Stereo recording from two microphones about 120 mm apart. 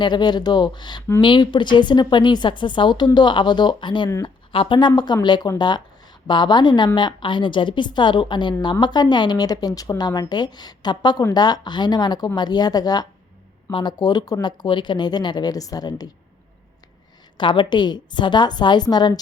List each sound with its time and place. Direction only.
0.0 s a woman's voice: 40° left (ahead or behind)
17.3 s a woman's voice: 45° left (ahead or behind)